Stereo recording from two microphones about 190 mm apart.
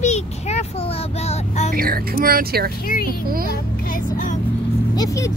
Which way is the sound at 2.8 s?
50° left (ahead or behind).